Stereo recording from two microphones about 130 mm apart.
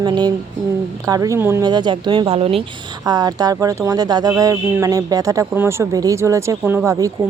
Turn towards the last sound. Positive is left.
turn(degrees=-25)  # may be behind; listen again after turning